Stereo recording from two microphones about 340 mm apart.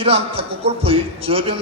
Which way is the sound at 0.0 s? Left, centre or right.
Centre.